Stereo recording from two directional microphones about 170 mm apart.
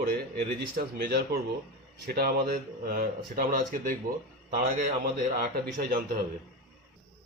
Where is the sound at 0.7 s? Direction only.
65° right (ahead or behind).